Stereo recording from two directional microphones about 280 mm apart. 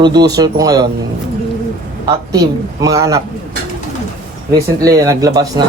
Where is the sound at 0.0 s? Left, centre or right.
Centre.